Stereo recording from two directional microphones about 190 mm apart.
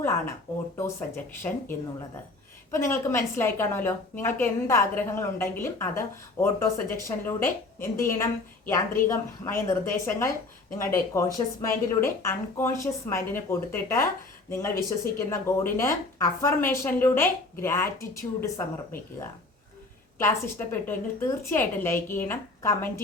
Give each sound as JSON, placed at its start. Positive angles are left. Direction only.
{"t": 0.8, "sound": "a woman's voice", "side_deg": 10}
{"t": 2.7, "sound": "a woman's voice", "side_deg": 15}
{"t": 20.1, "sound": "a woman's voice", "side_deg": 15}